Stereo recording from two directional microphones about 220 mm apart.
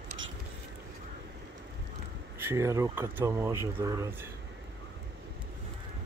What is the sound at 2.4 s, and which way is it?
Speech, 10° right (ahead or behind).